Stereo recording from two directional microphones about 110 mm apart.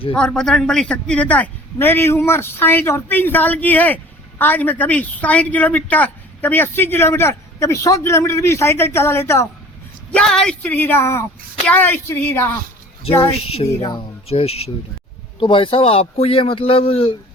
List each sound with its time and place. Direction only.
0.1 s a man's voice: 5° left (ahead or behind); by 9.5 s 25° left (ahead or behind)
10.2 s a man's voice: 5° left (ahead or behind)
13.4 s speech: 65° left (ahead or behind)
15.4 s speech: 50° left (ahead or behind)